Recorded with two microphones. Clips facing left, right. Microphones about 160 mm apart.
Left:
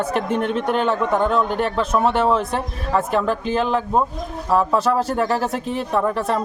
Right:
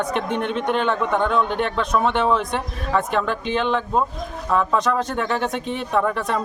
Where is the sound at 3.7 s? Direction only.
5° left (ahead or behind).